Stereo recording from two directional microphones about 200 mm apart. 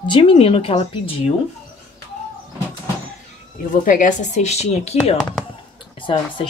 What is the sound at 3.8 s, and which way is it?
Speech, 40° left (ahead or behind).